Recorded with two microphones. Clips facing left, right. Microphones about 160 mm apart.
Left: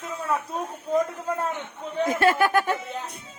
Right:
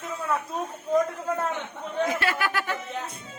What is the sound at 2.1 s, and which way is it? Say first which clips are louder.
Speech: left 6 dB; 45° left (ahead or behind).